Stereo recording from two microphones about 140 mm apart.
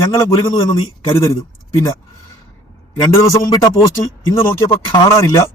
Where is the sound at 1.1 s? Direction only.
20° left (ahead or behind).